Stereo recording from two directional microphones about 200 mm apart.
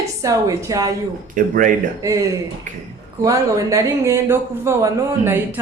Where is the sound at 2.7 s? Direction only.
40° right (ahead or behind).